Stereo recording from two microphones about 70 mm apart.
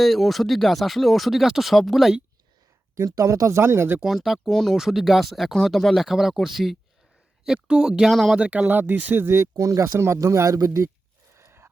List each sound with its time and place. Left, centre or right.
0.0 s speech: centre
2.9 s speech: right
3.6 s speech: right
4.0 s speech: centre
8.4 s speech: centre; by 9.8 s right
9.8 s speech: right
11.3 s a sound: right